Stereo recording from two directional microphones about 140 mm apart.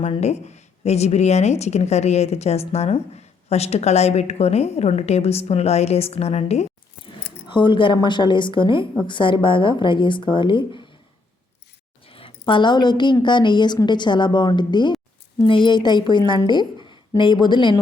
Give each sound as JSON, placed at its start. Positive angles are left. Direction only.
{"t": 0.0, "sound": "a woman's voice", "side_deg": 50}
{"t": 7.4, "sound": "a woman's voice", "side_deg": 35}
{"t": 12.0, "sound": "a woman's voice", "side_deg": 40}